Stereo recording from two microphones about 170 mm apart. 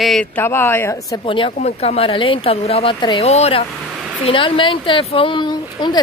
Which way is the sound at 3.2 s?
40° left (ahead or behind).